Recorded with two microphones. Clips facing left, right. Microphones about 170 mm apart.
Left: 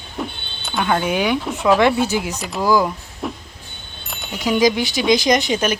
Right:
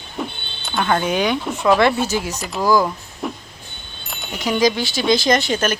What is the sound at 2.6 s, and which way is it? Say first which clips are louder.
Speech: even; 10° left (ahead or behind).